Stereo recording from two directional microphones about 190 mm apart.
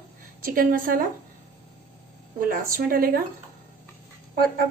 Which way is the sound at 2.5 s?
50° right (ahead or behind).